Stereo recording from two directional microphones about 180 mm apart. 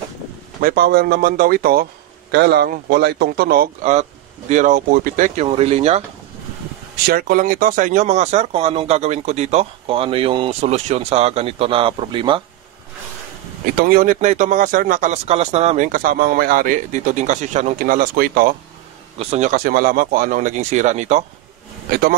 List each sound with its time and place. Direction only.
0.6 s speech: 55° right (ahead or behind)
2.3 s speech: 65° right (ahead or behind)
3.9 s speech: 40° right (ahead or behind)
7.1 s speech: 55° right (ahead or behind); by 12.4 s 25° right (ahead or behind)
13.7 s speech: 50° right (ahead or behind)
19.1 s speech: 40° right (ahead or behind)